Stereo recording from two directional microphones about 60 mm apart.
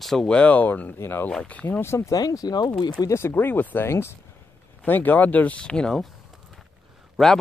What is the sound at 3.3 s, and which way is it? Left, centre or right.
Speech, left.